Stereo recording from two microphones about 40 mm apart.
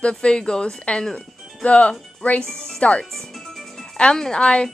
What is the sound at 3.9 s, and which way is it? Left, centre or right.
Speech, centre.